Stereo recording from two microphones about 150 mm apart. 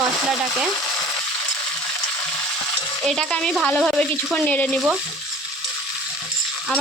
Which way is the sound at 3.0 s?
Centre (ahead or behind).